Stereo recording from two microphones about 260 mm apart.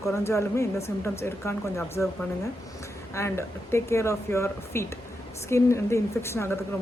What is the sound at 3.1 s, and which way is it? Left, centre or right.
Speech, centre.